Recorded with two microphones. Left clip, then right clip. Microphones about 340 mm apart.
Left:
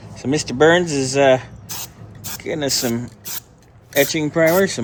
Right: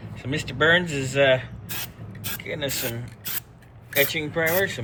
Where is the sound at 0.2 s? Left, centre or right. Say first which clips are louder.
Left 8 dB; centre.